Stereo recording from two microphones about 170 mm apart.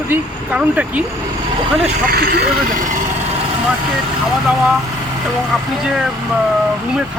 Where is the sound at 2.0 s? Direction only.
65° right (ahead or behind).